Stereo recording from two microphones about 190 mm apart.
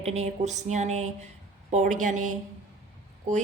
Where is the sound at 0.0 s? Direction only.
35° right (ahead or behind).